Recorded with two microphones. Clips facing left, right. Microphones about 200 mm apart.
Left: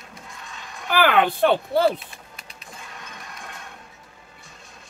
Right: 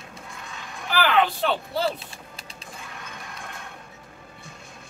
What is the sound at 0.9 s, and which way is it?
Speech, 55° left (ahead or behind).